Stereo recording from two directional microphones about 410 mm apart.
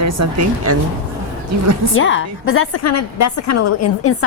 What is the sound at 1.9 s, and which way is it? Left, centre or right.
A woman's voice, left.